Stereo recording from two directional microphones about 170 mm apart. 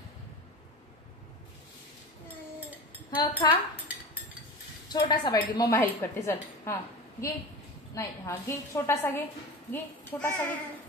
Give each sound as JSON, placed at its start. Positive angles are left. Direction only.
{"t": 3.2, "sound": "speech", "side_deg": 30}
{"t": 4.8, "sound": "a woman's voice", "side_deg": 25}